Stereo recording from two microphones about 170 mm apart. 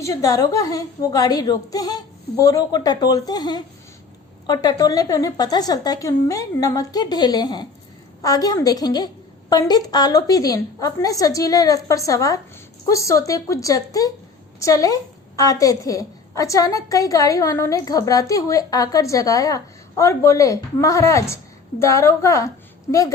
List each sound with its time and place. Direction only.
0.0 s a woman's voice: 20° left (ahead or behind)